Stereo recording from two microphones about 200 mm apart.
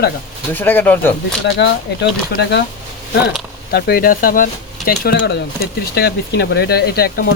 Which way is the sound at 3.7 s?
50° left (ahead or behind).